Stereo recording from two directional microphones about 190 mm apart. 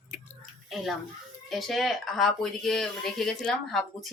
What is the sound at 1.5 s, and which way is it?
Speech, centre (ahead or behind).